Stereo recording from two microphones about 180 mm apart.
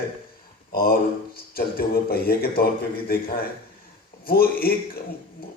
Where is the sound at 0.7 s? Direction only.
55° left (ahead or behind).